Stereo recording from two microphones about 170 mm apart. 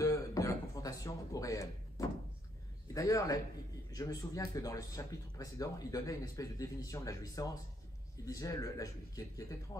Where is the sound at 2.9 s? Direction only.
20° left (ahead or behind).